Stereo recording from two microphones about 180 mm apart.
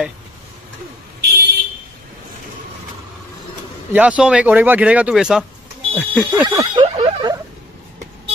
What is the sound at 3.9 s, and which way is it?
Speech, 5° right (ahead or behind).